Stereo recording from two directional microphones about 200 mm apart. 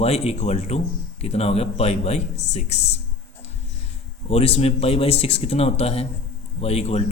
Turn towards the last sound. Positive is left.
turn(degrees=30)  # may be behind; listen again after turning